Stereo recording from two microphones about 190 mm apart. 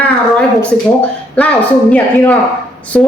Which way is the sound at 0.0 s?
5° left (ahead or behind).